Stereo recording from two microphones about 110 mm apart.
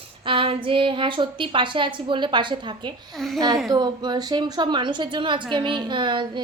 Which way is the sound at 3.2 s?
5° left (ahead or behind).